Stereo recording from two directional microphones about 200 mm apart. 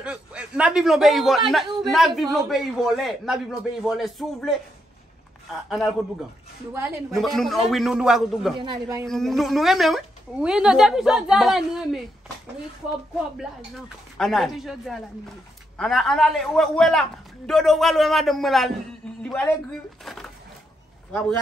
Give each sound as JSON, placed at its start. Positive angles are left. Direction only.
{"t": 0.0, "sound": "a woman's voice", "side_deg": -5}
{"t": 5.7, "sound": "a woman's voice", "side_deg": 0}
{"t": 7.1, "sound": "a woman's voice", "side_deg": 0}
{"t": 8.5, "sound": "speech", "side_deg": -20}
{"t": 9.1, "sound": "a woman's voice", "side_deg": 0}
{"t": 13.4, "sound": "a woman's voice", "side_deg": 0}